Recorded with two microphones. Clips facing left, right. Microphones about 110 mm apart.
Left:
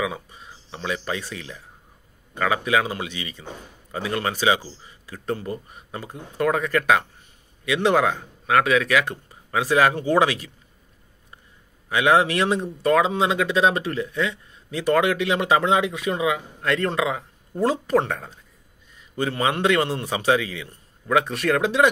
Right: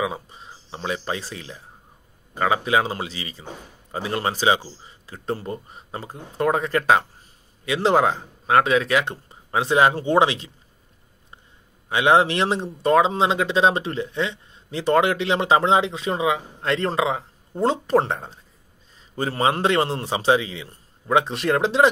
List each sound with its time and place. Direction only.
0.0 s speech: 30° right (ahead or behind)
11.9 s speech: 25° right (ahead or behind)